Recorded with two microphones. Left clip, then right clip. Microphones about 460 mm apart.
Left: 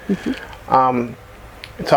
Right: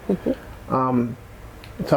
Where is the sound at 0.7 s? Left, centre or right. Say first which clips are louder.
Left 7 dB; left.